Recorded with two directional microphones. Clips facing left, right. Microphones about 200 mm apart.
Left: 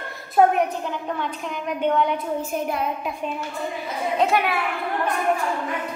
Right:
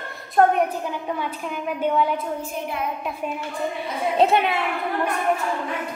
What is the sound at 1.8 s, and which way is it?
Speech, 5° right (ahead or behind).